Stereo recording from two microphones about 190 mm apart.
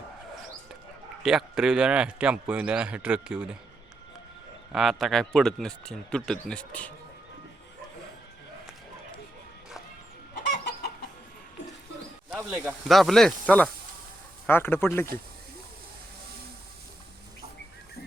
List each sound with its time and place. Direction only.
1.2 s speech: centre (ahead or behind)
4.7 s speech: centre (ahead or behind)
10.3 s chicken: 60° left (ahead or behind)
12.3 s speech: 10° right (ahead or behind)
12.9 s speech: centre (ahead or behind)